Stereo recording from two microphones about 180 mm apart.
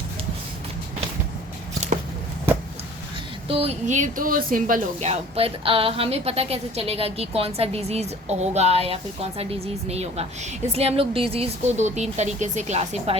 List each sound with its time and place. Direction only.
3.5 s speech: 35° right (ahead or behind)